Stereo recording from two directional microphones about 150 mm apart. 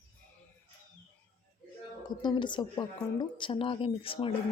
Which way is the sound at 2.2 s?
30° left (ahead or behind).